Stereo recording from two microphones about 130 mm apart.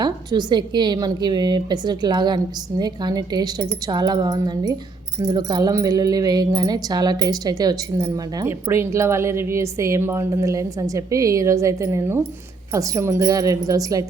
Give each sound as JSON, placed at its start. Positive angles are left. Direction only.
{"t": 0.0, "sound": "a woman's voice", "side_deg": -35}